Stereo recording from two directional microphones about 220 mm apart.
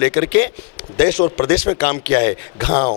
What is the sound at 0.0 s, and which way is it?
A man's voice, 10° left (ahead or behind).